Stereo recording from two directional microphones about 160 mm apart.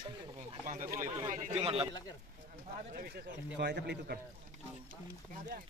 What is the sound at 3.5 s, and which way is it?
Speech, 90° right.